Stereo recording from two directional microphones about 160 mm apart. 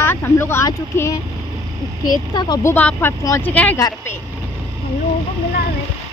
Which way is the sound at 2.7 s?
10° left (ahead or behind).